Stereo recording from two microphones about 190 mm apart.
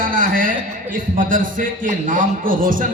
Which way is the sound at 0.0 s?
45° right (ahead or behind).